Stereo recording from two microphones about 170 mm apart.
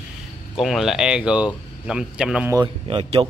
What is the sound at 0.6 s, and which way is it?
Speech, centre (ahead or behind).